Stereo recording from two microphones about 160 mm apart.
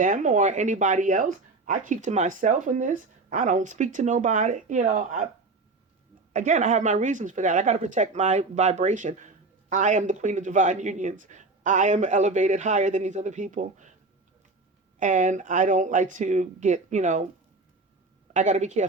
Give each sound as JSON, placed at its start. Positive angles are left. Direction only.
{"t": 0.0, "sound": "speech", "side_deg": -55}
{"t": 6.3, "sound": "speech", "side_deg": -50}
{"t": 14.9, "sound": "speech", "side_deg": -50}
{"t": 18.3, "sound": "speech", "side_deg": -50}